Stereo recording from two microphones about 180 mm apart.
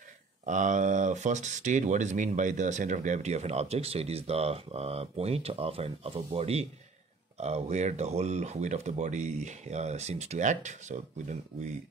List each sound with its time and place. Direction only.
0.5 s speech: 45° right (ahead or behind)